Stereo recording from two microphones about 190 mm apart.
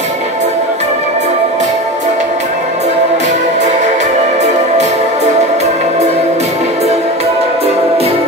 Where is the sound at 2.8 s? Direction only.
40° right (ahead or behind).